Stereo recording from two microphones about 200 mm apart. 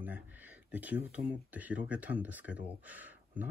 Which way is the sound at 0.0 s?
10° right (ahead or behind).